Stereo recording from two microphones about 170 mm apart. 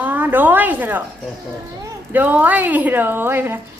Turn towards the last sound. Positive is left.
turn(degrees=-15)  # may be behind; listen again after turning